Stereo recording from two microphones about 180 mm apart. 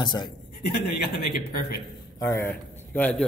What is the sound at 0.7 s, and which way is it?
A man's voice, 60° left (ahead or behind).